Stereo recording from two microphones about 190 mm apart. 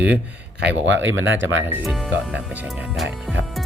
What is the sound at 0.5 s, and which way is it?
Speech, 60° right (ahead or behind).